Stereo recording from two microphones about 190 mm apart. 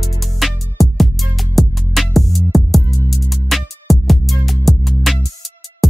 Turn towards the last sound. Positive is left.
turn(degrees=0)  # may be behind; listen again after turning